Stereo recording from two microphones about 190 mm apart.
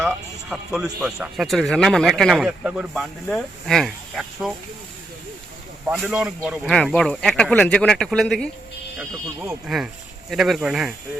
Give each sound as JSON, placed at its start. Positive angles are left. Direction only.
{"t": 0.5, "sound": "a man's voice", "side_deg": -5}
{"t": 5.8, "sound": "a man's voice", "side_deg": -5}
{"t": 9.0, "sound": "a man's voice", "side_deg": -10}